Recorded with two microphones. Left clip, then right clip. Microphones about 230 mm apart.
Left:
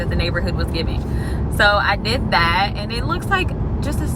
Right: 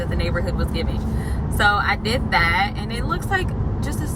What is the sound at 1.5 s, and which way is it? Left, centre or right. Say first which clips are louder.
Speech: left 3 dB; centre.